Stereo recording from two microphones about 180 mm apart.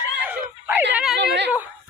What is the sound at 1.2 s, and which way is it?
Speech, 70° right (ahead or behind).